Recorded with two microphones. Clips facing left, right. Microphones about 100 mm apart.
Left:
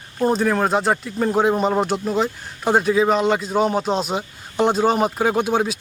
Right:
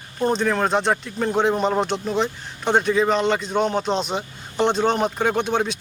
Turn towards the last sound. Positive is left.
turn(degrees=5)  # may be behind; listen again after turning